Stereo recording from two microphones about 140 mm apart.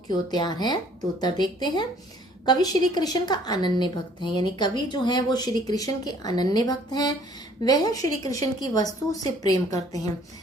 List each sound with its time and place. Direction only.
0.1 s a woman's voice: 30° left (ahead or behind)